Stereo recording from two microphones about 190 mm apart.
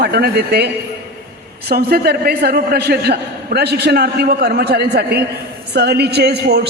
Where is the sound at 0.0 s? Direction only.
55° right (ahead or behind).